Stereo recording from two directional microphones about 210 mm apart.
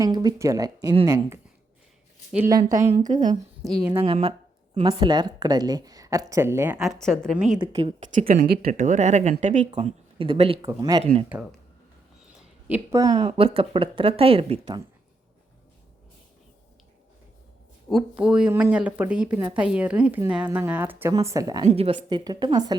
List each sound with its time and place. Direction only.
0.0 s speech: 20° right (ahead or behind)
3.7 s speech: 5° right (ahead or behind)
4.0 s speech: 25° right (ahead or behind); by 7.6 s centre (ahead or behind)
7.6 s speech: 25° right (ahead or behind)
10.6 s speech: 15° right (ahead or behind)
11.0 s speech: 30° right (ahead or behind)
12.6 s speech: 10° right (ahead or behind)
13.1 s speech: 30° right (ahead or behind)
18.2 s speech: 5° right (ahead or behind)
21.6 s speech: 30° right (ahead or behind)